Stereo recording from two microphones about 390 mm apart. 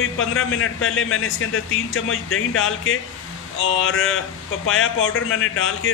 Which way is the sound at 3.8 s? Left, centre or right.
Left.